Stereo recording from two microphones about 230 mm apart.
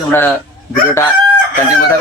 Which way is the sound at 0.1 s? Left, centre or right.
Centre.